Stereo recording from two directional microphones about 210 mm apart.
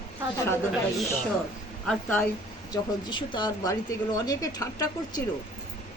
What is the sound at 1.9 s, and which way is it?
Speech, 10° left (ahead or behind).